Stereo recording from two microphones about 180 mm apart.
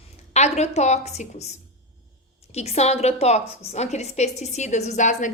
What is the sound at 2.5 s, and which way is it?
A woman's voice, 35° left (ahead or behind).